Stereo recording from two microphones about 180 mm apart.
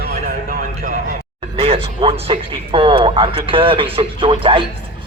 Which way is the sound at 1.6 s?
30° right (ahead or behind).